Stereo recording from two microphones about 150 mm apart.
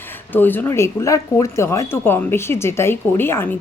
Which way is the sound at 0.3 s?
15° left (ahead or behind).